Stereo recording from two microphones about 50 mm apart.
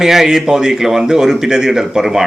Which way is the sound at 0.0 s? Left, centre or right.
Centre.